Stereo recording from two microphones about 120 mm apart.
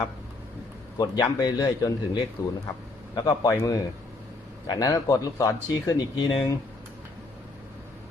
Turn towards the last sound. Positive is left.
turn(degrees=40)  # may be behind; listen again after turning